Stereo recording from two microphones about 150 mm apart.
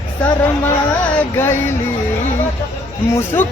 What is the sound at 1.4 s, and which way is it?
Music, 15° left (ahead or behind).